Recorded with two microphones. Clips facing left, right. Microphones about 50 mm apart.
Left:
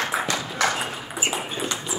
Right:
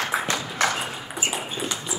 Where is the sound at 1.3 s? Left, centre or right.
Centre.